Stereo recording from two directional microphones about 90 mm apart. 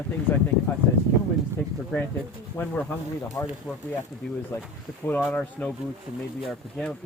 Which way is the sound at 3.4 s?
40° left (ahead or behind).